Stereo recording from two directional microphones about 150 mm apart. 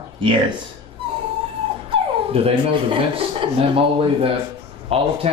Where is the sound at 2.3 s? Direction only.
40° right (ahead or behind).